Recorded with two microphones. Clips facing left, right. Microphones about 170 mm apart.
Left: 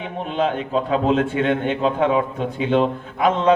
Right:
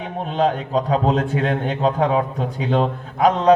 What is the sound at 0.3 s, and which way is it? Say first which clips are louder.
A man's voice: right 2 dB; 40° right (ahead or behind).